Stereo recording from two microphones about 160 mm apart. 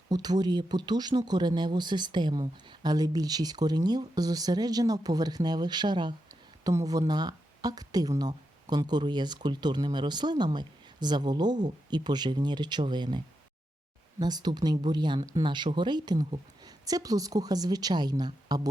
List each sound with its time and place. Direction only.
0.1 s speech: 25° right (ahead or behind)